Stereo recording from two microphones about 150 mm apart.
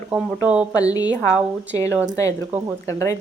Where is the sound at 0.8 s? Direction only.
25° left (ahead or behind).